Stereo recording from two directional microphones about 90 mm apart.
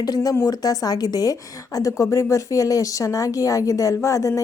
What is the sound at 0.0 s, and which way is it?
A woman's voice, 45° left (ahead or behind).